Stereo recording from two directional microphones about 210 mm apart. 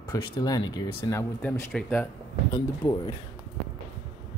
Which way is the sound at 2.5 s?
25° left (ahead or behind).